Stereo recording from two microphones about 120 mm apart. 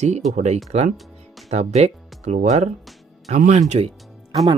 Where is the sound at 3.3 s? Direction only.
85° right; by 3.9 s 65° right (ahead or behind).